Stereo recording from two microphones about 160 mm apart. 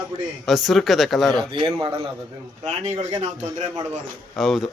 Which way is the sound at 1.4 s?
25° right (ahead or behind).